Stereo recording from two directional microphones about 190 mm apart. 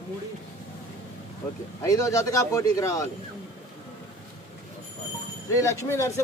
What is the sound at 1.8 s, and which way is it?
Speech, 15° left (ahead or behind).